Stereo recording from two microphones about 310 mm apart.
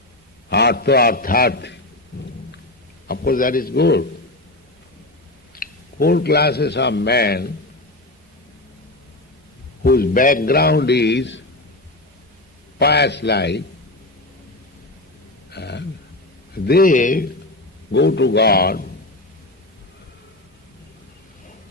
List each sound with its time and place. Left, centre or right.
0.5 s a man's voice: left
3.1 s a man's voice: left
5.5 s a man's voice: left
9.8 s a man's voice: left
12.8 s a man's voice: left
15.4 s throat clearing: left
16.6 s a man's voice: left